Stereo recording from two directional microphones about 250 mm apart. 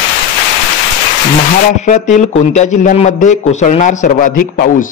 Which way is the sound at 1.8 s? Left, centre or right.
Left.